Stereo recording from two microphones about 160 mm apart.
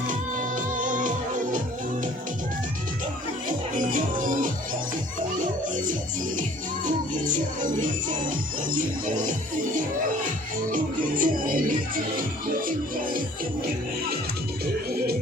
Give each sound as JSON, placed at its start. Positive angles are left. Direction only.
{"t": 0.1, "sound": "music", "side_deg": -55}
{"t": 3.8, "sound": "music", "side_deg": -55}
{"t": 6.8, "sound": "music", "side_deg": -55}
{"t": 9.0, "sound": "music", "side_deg": -55}
{"t": 11.2, "sound": "music", "side_deg": -60}
{"t": 14.6, "sound": "music", "side_deg": -75}